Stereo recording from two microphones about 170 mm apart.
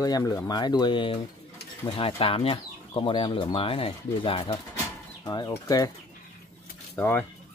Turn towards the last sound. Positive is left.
turn(degrees=10)  # may be behind; listen again after turning